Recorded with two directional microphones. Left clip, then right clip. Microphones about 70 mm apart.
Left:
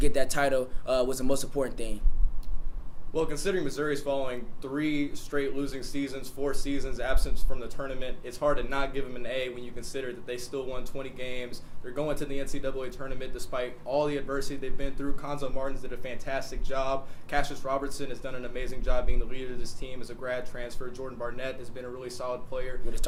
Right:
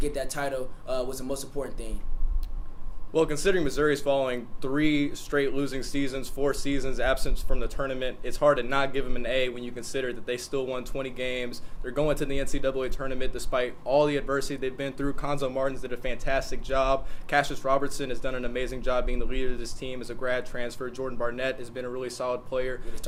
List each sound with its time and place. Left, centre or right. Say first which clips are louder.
0.0 s speech: left 4 dB; left
3.1 s speech: right 5 dB; right